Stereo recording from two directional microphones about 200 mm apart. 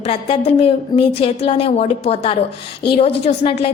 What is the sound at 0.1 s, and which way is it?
A woman's voice, 30° left (ahead or behind).